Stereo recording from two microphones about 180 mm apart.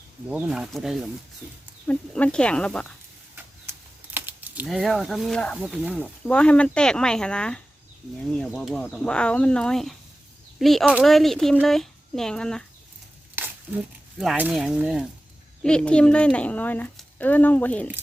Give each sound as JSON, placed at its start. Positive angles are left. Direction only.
{"t": 0.3, "sound": "speech", "side_deg": -5}
{"t": 3.3, "sound": "a sound", "side_deg": -10}
{"t": 4.6, "sound": "speech", "side_deg": 0}
{"t": 14.2, "sound": "speech", "side_deg": -5}